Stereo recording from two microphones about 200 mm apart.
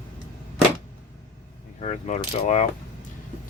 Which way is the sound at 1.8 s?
35° left (ahead or behind).